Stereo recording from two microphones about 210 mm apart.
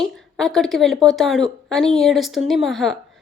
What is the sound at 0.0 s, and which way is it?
A woman's voice, centre (ahead or behind).